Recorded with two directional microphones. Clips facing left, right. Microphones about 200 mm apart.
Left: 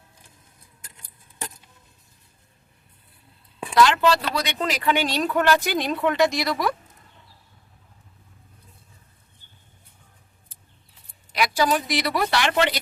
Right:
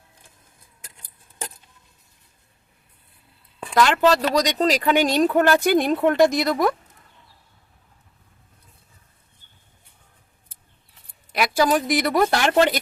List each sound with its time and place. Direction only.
3.8 s speech: 45° right (ahead or behind)
11.3 s speech: 50° right (ahead or behind)